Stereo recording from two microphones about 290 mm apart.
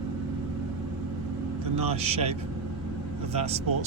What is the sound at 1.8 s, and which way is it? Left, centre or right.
Speech, right.